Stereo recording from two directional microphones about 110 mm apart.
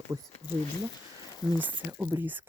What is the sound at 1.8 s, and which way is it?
Speech, 20° right (ahead or behind).